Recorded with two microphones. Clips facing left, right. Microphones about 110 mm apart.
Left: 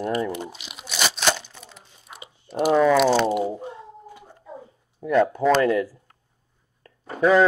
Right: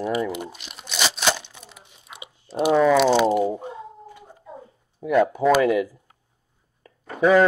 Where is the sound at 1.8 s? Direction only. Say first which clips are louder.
Right 1 dB; 20° right (ahead or behind).